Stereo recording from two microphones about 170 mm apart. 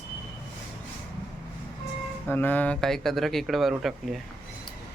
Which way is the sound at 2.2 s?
10° left (ahead or behind).